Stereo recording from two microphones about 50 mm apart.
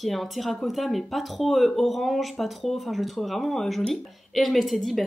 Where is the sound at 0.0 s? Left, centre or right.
Centre.